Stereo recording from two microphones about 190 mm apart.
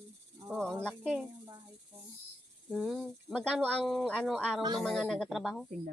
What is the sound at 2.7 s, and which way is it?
Speech, centre (ahead or behind).